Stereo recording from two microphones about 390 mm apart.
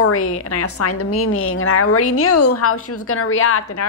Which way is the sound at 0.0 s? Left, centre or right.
Left.